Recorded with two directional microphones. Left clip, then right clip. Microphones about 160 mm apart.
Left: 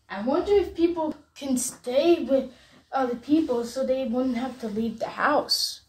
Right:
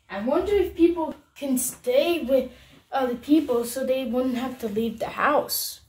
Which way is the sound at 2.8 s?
15° right (ahead or behind).